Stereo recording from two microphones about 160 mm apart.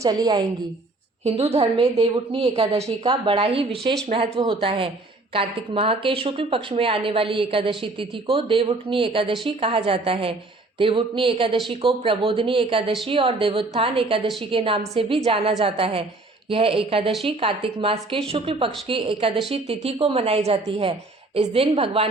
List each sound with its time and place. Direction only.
0.0 s a woman's voice: 25° right (ahead or behind)
1.2 s a woman's voice: 40° right (ahead or behind)